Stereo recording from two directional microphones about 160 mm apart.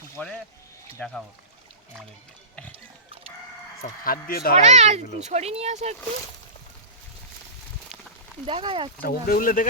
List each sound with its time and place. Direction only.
0.2 s speech: 10° left (ahead or behind)
3.8 s speech: 65° left (ahead or behind)
4.6 s speech: 45° right (ahead or behind)
8.4 s speech: 35° right (ahead or behind)
9.0 s speech: 65° left (ahead or behind)